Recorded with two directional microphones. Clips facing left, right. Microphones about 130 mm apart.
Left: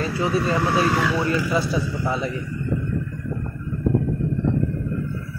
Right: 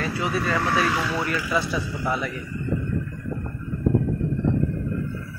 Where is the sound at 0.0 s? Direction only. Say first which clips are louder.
Left 3 dB; 30° left (ahead or behind).